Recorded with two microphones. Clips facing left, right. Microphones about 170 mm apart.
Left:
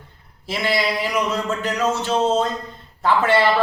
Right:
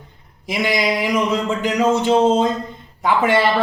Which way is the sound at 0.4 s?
15° right (ahead or behind).